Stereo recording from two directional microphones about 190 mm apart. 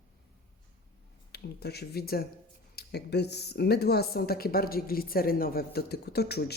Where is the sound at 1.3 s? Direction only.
60° left (ahead or behind).